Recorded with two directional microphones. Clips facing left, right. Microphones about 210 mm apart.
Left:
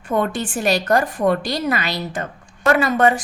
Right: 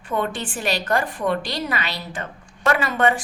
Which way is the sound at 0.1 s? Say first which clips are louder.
Left 4 dB; 45° left (ahead or behind).